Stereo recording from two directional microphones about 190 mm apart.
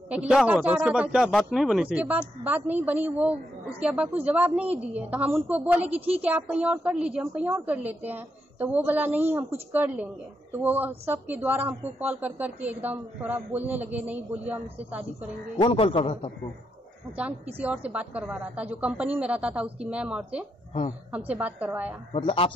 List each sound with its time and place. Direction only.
0.1 s a woman's voice: 5° right (ahead or behind)
15.5 s a man's voice: 30° left (ahead or behind)
17.2 s a woman's voice: 10° right (ahead or behind)
22.1 s a man's voice: 30° left (ahead or behind)